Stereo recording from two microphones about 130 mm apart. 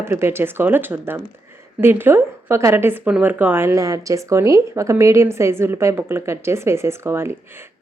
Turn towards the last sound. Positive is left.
turn(degrees=-20)  # may be behind; listen again after turning